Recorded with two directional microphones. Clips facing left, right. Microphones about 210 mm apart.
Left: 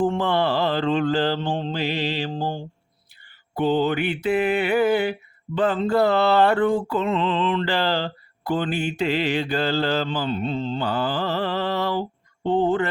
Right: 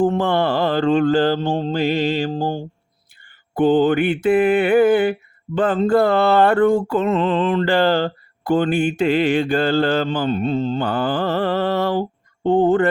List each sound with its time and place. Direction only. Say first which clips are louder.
0.0 s mantra: right 4 dB; 45° right (ahead or behind)